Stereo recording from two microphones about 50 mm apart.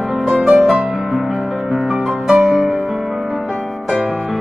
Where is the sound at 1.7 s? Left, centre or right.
Centre.